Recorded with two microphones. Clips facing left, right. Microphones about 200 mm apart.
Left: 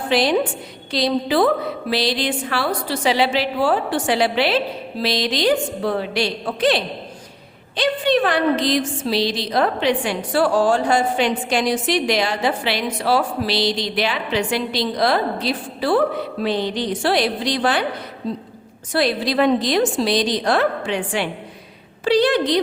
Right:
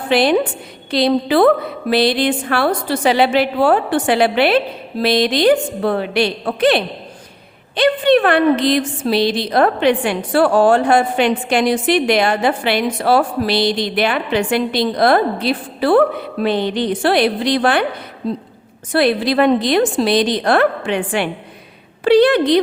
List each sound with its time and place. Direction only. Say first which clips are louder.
0.1 s a woman's voice: right 4 dB; 60° right (ahead or behind)
18.9 s a woman's voice: right 5 dB; 60° right (ahead or behind)